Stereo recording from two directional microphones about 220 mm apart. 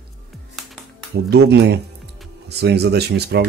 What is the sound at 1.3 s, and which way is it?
Speech, 50° right (ahead or behind).